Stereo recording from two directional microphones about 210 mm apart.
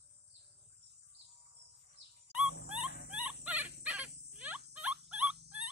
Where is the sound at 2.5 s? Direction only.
50° left (ahead or behind).